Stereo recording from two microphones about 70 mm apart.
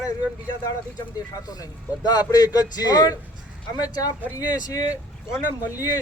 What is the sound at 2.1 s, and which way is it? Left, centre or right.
Speech, left.